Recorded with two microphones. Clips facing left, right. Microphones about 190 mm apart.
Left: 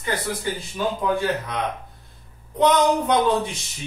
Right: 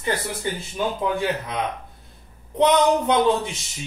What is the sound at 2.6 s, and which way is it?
Speech, 20° right (ahead or behind).